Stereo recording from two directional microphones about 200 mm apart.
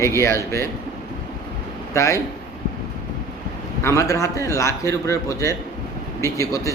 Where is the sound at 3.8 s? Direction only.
15° left (ahead or behind).